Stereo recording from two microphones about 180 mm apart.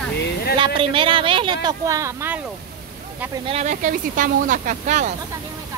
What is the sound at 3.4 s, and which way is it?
Speech, 35° right (ahead or behind).